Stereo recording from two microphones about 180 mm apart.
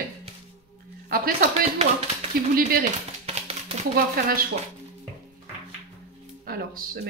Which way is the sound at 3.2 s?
35° right (ahead or behind).